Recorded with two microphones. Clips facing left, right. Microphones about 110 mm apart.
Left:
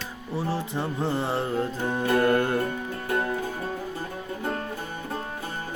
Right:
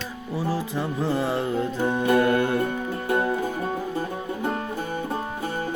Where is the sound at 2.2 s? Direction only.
40° left (ahead or behind).